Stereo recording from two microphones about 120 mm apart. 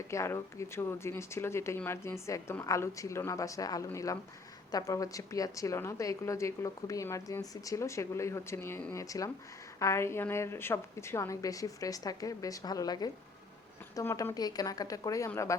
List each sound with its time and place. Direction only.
0.1 s a woman's voice: 25° left (ahead or behind)